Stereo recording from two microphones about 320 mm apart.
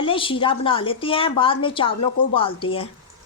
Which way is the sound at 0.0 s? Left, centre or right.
Centre.